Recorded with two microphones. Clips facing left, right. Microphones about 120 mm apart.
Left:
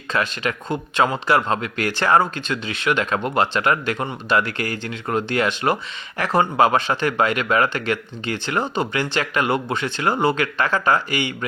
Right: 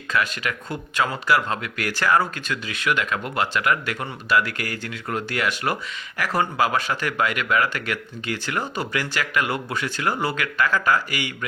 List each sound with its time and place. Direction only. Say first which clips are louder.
0.1 s speech: left 2 dB; 25° left (ahead or behind)